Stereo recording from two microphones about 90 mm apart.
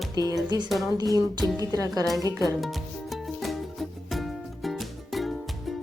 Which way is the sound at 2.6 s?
Centre (ahead or behind).